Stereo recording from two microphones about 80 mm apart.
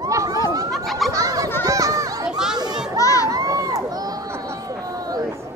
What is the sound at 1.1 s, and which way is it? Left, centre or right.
Children playing, right.